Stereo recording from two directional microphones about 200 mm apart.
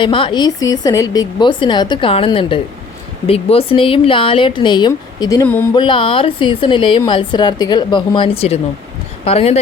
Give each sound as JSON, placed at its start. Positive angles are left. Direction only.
{"t": 0.0, "sound": "a woman's voice", "side_deg": 25}
{"t": 5.7, "sound": "a woman's voice", "side_deg": 25}